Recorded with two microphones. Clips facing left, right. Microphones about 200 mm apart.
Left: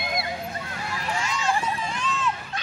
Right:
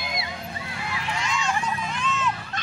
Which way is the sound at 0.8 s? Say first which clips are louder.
Even; 40° left (ahead or behind).